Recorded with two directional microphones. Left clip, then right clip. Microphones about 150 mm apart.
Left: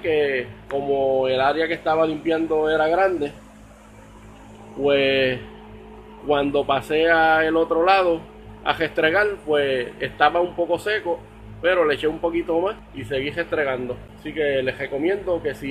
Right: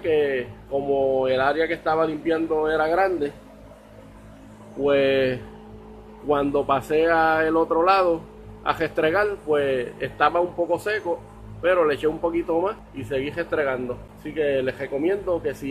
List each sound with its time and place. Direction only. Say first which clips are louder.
0.0 s a sound: left 1 dB; 5° left (ahead or behind)
0.8 s speech: left 1 dB; 15° left (ahead or behind); by 3.3 s 35° left (ahead or behind)
4.8 s speech: left 1 dB; 15° left (ahead or behind)